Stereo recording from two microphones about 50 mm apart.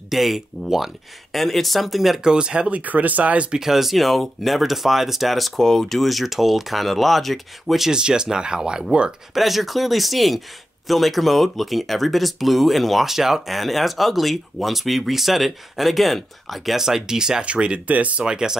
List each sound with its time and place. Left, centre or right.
0.1 s speech: centre; by 2.8 s right
2.8 s speech: right
3.5 s speech: centre
7.9 s speech: centre
9.3 s speech: centre; by 18.2 s right
18.2 s speech: centre